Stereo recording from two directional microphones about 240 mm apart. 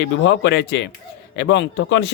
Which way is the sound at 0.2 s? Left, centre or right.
Left.